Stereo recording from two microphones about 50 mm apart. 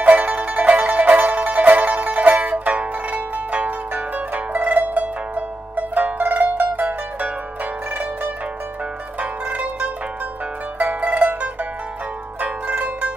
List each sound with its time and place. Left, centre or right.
0.0 s music: right
9.2 s zither: right